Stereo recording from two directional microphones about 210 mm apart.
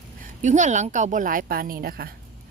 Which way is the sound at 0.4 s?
35° right (ahead or behind).